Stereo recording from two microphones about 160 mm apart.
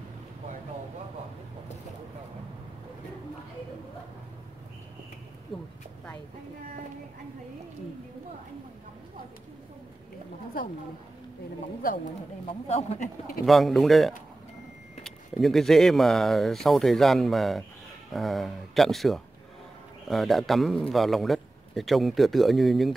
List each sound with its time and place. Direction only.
12.4 s speech: 40° left (ahead or behind)
13.5 s a man's voice: centre (ahead or behind)